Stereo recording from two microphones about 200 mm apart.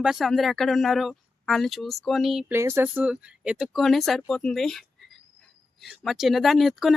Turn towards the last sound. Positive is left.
turn(degrees=0)  # may be behind; listen again after turning